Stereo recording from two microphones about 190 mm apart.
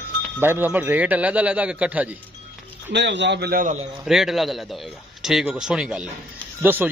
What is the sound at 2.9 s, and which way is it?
Speech, 65° right (ahead or behind).